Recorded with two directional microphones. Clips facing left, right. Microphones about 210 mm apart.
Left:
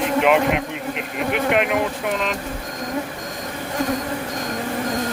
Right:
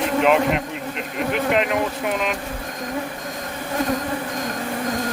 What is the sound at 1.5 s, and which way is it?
Speech, 5° left (ahead or behind).